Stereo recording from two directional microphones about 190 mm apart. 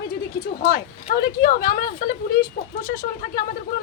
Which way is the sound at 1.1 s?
50° left (ahead or behind).